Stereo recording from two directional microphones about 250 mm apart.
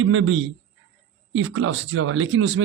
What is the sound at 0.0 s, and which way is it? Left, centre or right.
Speech, right.